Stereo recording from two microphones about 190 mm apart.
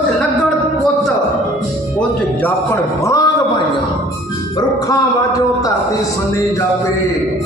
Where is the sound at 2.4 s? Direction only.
15° left (ahead or behind).